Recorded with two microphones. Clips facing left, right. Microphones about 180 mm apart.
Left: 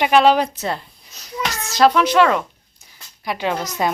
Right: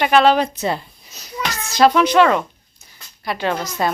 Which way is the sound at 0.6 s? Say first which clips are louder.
Right 3 dB; centre (ahead or behind).